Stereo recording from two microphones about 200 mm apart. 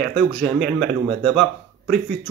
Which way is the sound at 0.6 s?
60° right (ahead or behind).